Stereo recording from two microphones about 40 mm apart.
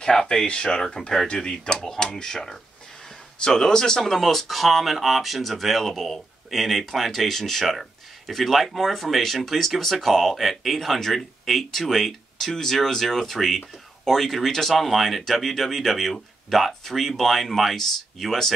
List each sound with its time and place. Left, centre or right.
0.0 s speech: centre
1.5 s speech: centre
4.1 s speech: centre